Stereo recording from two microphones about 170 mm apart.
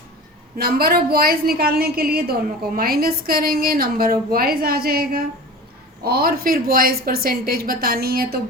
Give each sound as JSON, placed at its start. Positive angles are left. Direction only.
{"t": 0.5, "sound": "a woman's voice", "side_deg": -65}